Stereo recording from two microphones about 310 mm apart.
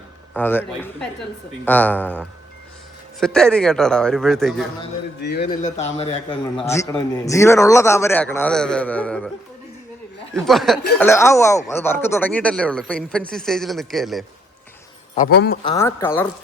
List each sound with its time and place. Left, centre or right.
0.3 s speech: centre
3.2 s speech: centre
5.4 s a man's voice: left
6.6 s speech: centre
10.3 s speech: centre
15.1 s speech: left
15.6 s speech: centre